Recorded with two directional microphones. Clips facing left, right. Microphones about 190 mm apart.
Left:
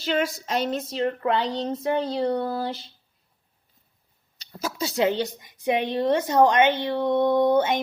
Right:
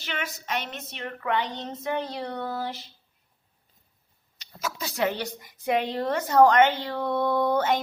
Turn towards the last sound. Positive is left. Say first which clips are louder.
# left 4 dB
turn(degrees=20)  # may be behind; listen again after turning